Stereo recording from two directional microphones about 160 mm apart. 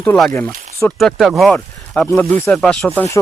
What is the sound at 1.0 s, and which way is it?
Speech, centre (ahead or behind).